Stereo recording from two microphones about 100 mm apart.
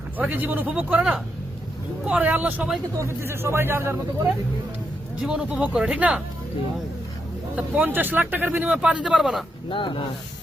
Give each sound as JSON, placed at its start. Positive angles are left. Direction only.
{"t": 0.2, "sound": "speech", "side_deg": -15}
{"t": 3.0, "sound": "speech", "side_deg": -25}
{"t": 5.2, "sound": "speech", "side_deg": -10}
{"t": 7.5, "sound": "speech", "side_deg": -15}
{"t": 9.6, "sound": "speech", "side_deg": 55}